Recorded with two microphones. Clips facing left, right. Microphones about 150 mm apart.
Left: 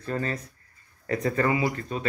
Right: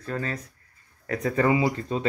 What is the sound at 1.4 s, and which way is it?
Speech, 25° right (ahead or behind).